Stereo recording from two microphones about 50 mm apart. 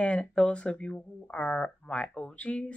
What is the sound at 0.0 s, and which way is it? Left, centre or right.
Speech, left.